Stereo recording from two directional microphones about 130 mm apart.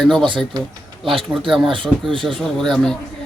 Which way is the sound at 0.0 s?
5° left (ahead or behind).